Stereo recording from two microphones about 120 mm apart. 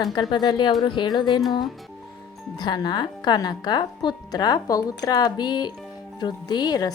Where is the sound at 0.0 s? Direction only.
35° left (ahead or behind).